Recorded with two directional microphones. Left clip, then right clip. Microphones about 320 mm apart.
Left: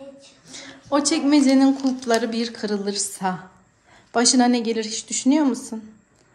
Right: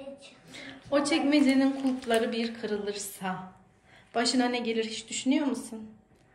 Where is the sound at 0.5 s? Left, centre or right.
Centre.